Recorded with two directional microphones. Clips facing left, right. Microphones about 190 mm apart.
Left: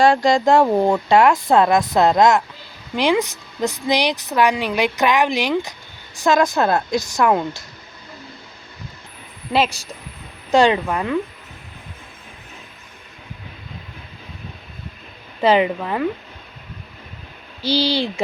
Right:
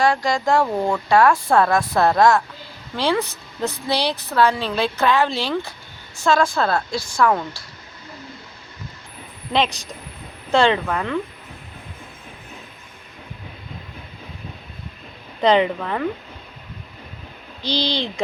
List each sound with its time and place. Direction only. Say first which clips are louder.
0.0 s a woman's voice: left 5 dB; 25° left (ahead or behind)
10.5 s a woman's voice: left 2 dB; 15° left (ahead or behind)
15.4 s a woman's voice: left 1 dB; 5° left (ahead or behind)
17.6 s a woman's voice: left 4 dB; 10° left (ahead or behind)